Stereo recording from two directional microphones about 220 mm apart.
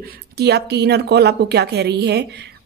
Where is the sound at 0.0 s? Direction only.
45° right (ahead or behind).